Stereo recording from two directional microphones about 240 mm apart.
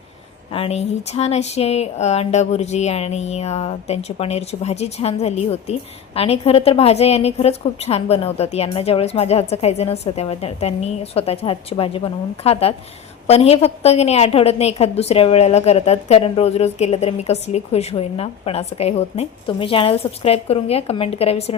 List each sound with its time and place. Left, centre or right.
0.5 s a woman's voice: left